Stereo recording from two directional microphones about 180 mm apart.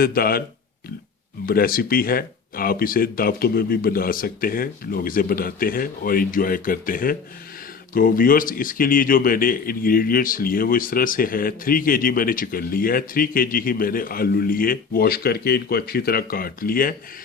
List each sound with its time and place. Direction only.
0.0 s speech: 55° left (ahead or behind)
1.5 s speech: 55° left (ahead or behind)